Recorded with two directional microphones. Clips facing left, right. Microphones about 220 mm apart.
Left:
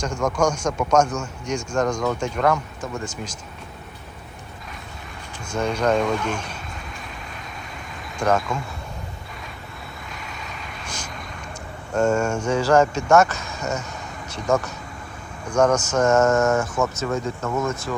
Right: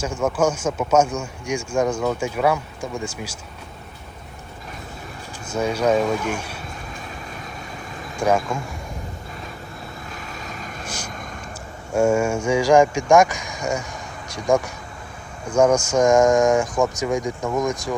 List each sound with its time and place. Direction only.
0.0 s speech: 5° right (ahead or behind)
5.5 s speech: 5° right (ahead or behind)
8.2 s speech: 10° right (ahead or behind)
10.4 s vehicle: 45° right (ahead or behind)
11.9 s speech: 10° right (ahead or behind)